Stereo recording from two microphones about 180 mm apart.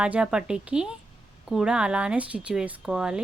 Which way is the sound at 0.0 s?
5° right (ahead or behind).